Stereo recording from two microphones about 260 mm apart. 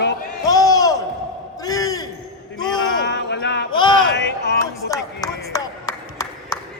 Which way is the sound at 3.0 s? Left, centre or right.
Left.